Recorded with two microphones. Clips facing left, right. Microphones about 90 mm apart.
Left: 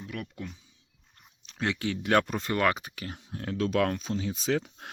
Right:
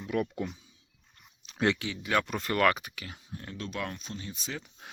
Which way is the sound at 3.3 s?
80° left.